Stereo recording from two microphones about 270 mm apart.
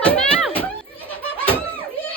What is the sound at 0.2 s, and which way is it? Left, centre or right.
Children playing, centre.